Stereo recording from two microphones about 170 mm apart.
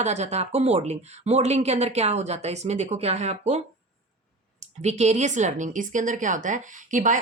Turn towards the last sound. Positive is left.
turn(degrees=-50)  # may be behind; listen again after turning